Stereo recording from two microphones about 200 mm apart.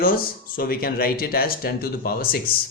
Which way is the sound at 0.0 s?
45° left (ahead or behind).